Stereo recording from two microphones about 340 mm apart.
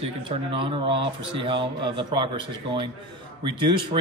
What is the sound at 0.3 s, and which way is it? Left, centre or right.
A man's voice, centre.